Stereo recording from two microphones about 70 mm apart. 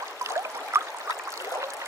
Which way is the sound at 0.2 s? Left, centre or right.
Right.